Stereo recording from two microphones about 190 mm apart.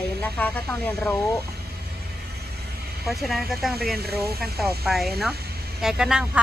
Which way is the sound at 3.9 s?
55° right (ahead or behind).